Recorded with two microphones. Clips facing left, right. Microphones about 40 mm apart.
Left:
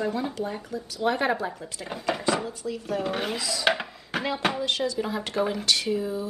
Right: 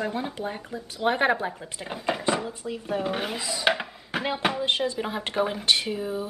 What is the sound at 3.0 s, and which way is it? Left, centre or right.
Speech, centre.